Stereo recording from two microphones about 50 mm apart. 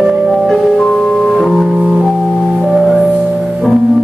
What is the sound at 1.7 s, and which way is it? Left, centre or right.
Organ, centre.